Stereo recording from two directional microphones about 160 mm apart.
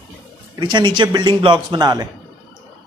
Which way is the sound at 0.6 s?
30° right (ahead or behind).